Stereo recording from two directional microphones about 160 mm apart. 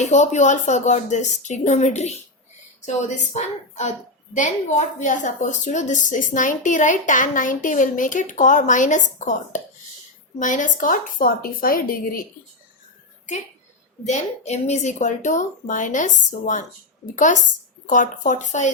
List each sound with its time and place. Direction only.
0.0 s a woman's voice: 45° left (ahead or behind); by 12.2 s 65° left (ahead or behind)
14.0 s a woman's voice: 45° left (ahead or behind)